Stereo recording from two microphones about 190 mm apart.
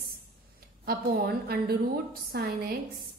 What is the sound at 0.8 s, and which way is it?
A woman's voice, 50° right (ahead or behind).